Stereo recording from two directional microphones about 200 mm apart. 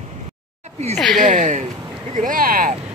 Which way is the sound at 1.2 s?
40° right (ahead or behind).